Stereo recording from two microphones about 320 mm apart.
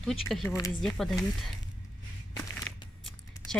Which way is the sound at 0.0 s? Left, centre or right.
Centre.